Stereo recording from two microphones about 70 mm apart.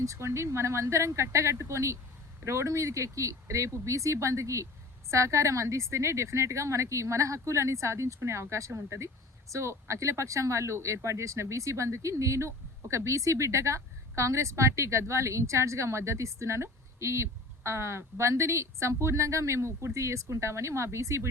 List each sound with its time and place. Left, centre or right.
0.0 s speech: right